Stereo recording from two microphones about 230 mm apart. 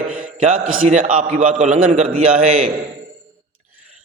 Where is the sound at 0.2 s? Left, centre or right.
Right.